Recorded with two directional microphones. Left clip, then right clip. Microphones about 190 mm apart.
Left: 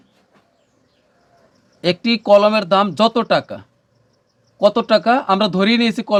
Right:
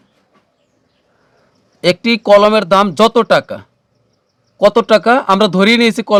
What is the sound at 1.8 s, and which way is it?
Speech, 40° right (ahead or behind).